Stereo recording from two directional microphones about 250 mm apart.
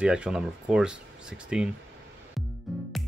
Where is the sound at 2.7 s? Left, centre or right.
Centre.